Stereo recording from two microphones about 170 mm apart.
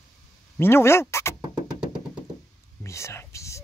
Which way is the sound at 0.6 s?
15° left (ahead or behind).